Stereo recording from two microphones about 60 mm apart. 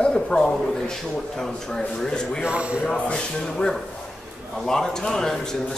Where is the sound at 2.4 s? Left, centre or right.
Centre.